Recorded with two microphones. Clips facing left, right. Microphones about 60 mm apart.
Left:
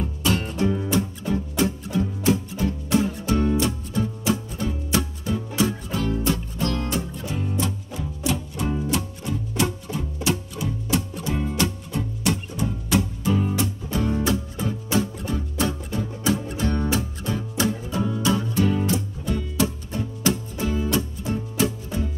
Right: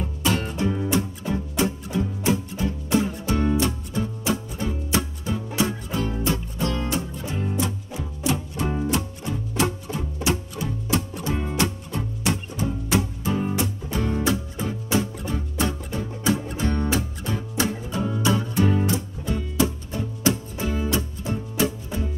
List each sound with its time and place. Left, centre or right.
0.2 s music: centre
13.3 s music: centre